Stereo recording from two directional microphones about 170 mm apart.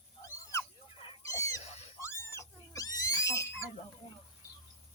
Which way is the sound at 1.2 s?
20° left (ahead or behind).